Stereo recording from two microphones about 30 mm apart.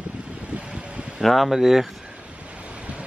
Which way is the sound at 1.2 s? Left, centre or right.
Centre.